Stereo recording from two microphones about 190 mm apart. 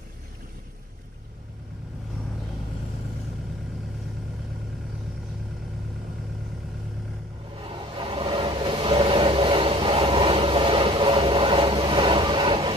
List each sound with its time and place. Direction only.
7.7 s vehicle: 25° right (ahead or behind)